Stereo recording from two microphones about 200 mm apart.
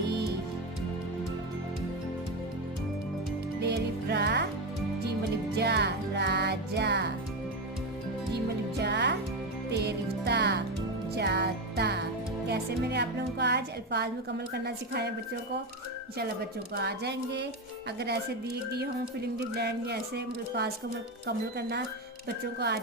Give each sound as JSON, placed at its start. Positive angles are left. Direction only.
{"t": 3.6, "sound": "music", "side_deg": -55}
{"t": 5.5, "sound": "music", "side_deg": -55}
{"t": 8.8, "sound": "music", "side_deg": -60}
{"t": 10.2, "sound": "music", "side_deg": -60}
{"t": 12.5, "sound": "a woman's voice", "side_deg": -55}
{"t": 16.7, "sound": "speech", "side_deg": -55}
{"t": 22.5, "sound": "speech", "side_deg": -55}